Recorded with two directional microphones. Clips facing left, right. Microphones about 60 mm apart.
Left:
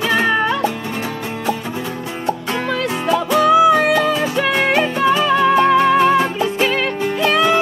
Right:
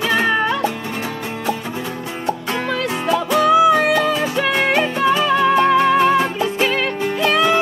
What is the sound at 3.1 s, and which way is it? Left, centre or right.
Music, left.